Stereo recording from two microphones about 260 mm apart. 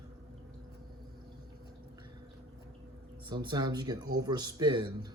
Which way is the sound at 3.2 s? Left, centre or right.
Centre.